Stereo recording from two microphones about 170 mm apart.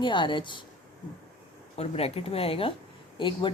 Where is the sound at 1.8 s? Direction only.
35° left (ahead or behind).